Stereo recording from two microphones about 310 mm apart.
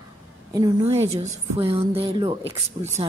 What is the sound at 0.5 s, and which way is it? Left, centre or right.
A woman's voice, centre.